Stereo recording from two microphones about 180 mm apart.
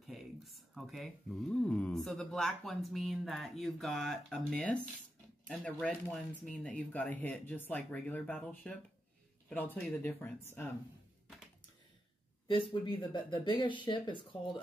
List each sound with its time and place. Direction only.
0.0 s speech: centre (ahead or behind)
12.4 s speech: 25° left (ahead or behind)